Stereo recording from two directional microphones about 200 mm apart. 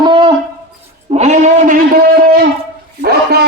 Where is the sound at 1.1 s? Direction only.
35° right (ahead or behind); by 3.4 s 50° right (ahead or behind).